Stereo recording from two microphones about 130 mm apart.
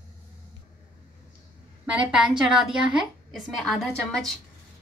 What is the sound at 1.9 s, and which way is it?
A woman's voice, 10° right (ahead or behind).